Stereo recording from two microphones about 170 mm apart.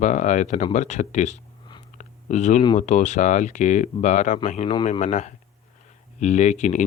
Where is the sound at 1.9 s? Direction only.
45° left (ahead or behind).